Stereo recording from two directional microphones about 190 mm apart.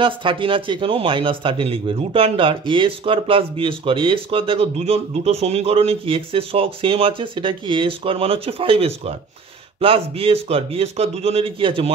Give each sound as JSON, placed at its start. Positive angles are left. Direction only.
{"t": 0.0, "sound": "a man's voice", "side_deg": -25}